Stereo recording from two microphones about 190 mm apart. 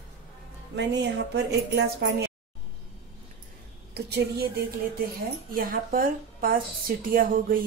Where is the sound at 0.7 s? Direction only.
65° right (ahead or behind).